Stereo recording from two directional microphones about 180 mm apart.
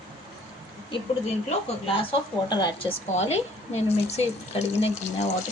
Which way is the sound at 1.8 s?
30° left (ahead or behind).